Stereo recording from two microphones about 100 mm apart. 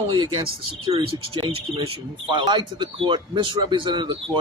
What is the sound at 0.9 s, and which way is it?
Speech, 75° right (ahead or behind).